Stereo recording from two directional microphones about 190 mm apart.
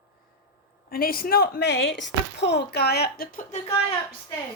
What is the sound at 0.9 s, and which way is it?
Speech, 50° left (ahead or behind).